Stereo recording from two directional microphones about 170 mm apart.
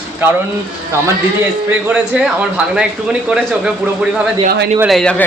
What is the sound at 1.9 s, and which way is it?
A man's voice, 5° right (ahead or behind).